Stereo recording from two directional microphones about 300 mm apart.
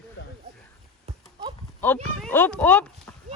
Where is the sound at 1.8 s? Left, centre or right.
Centre.